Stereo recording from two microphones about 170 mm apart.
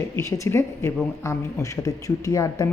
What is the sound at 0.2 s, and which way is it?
A woman's voice, 15° left (ahead or behind).